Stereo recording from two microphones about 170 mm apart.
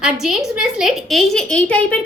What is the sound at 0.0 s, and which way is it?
A woman's voice, centre (ahead or behind).